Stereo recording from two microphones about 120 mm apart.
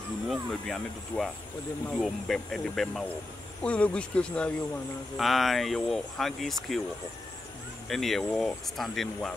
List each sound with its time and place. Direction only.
0.3 s speech: 5° left (ahead or behind)
7.9 s speech: centre (ahead or behind)